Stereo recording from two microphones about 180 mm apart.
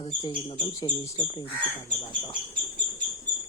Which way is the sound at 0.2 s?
25° left (ahead or behind).